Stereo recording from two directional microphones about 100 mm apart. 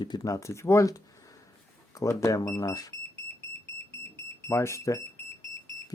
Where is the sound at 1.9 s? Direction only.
35° left (ahead or behind).